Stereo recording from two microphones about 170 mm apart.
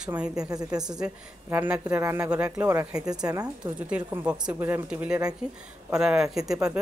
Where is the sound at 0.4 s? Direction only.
20° right (ahead or behind).